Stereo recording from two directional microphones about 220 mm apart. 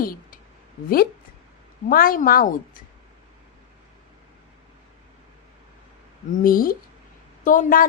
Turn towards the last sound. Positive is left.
turn(degrees=40)  # may be behind; listen again after turning